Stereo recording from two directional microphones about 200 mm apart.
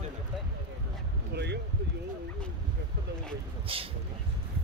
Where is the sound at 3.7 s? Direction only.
25° right (ahead or behind).